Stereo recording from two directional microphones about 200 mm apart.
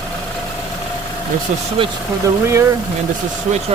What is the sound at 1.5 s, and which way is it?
Speech, 35° right (ahead or behind).